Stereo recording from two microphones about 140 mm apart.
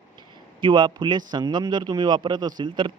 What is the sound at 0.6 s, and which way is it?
A man's voice, 35° right (ahead or behind).